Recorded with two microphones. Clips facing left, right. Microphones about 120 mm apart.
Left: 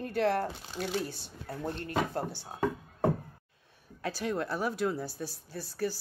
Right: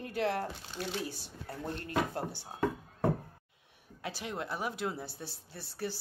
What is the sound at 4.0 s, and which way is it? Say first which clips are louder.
A woman's voice: left 6 dB; 20° right (ahead or behind).